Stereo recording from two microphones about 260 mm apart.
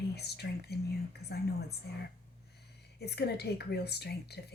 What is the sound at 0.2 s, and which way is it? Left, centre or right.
A woman's voice, left.